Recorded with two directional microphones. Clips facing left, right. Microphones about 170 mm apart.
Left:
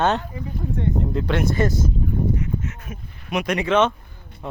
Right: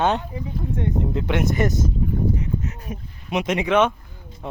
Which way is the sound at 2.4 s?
30° right (ahead or behind).